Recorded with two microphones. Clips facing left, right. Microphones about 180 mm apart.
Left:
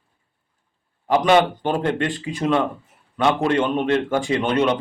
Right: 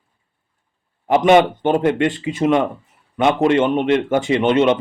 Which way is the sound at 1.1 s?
20° right (ahead or behind).